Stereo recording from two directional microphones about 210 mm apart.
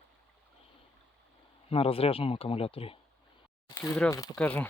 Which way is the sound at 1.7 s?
25° left (ahead or behind).